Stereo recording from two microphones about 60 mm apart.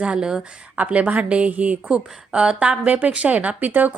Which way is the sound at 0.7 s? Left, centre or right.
Right.